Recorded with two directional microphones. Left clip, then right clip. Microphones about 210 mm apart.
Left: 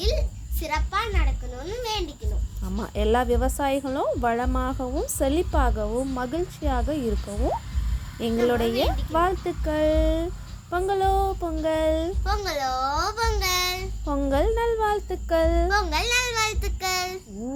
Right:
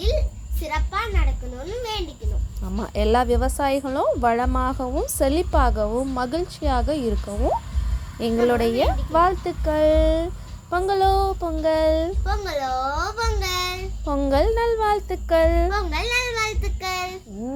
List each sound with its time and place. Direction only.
0.0 s insect: 15° left (ahead or behind)
2.6 s speech: centre (ahead or behind)
12.2 s a child's voice: 15° left (ahead or behind)
14.0 s speech: 5° right (ahead or behind)
15.7 s child singing: 15° left (ahead or behind)